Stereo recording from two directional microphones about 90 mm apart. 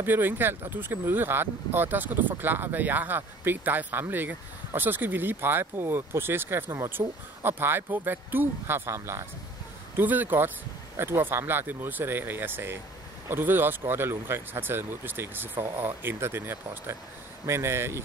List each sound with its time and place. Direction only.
0.0 s speech: 25° right (ahead or behind)
9.9 s speech: 20° right (ahead or behind)